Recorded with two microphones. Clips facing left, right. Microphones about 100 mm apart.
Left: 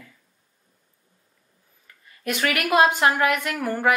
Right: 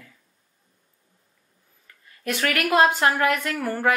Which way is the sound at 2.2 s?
15° left (ahead or behind).